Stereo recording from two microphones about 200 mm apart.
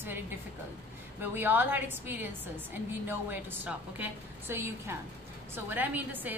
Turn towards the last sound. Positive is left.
turn(degrees=-10)  # may be behind; listen again after turning